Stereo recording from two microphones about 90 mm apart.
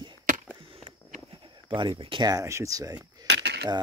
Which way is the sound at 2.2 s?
35° right (ahead or behind).